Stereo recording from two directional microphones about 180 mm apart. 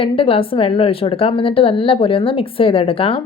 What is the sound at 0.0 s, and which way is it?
A woman's voice, 30° left (ahead or behind).